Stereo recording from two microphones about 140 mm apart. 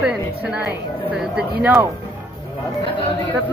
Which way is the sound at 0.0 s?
5° right (ahead or behind).